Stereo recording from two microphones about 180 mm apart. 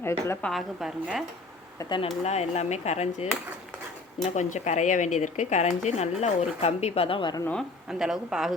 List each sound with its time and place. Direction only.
0.0 s a woman's voice: 15° left (ahead or behind)
0.5 s a woman's voice: centre (ahead or behind)
1.8 s speech: 25° left (ahead or behind)
2.2 s speech: 35° left (ahead or behind)
7.9 s a woman's voice: 5° right (ahead or behind)